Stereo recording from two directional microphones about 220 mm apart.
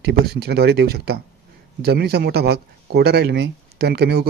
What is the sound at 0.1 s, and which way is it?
Speech, 45° right (ahead or behind).